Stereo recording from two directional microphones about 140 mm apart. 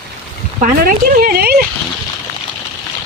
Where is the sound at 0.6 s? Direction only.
90° right.